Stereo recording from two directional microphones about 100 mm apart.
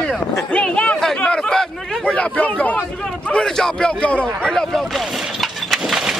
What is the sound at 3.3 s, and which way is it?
Speech, 10° left (ahead or behind).